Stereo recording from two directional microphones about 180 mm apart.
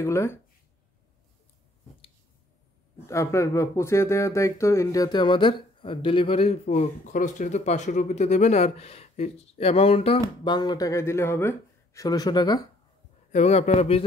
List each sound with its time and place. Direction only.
0.0 s speech: 15° left (ahead or behind)
3.1 s speech: 15° left (ahead or behind)
13.3 s speech: 40° left (ahead or behind)